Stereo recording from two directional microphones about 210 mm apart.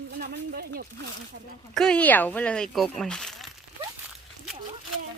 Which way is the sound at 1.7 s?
5° left (ahead or behind).